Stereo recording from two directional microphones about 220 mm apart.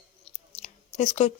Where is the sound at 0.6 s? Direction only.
30° left (ahead or behind).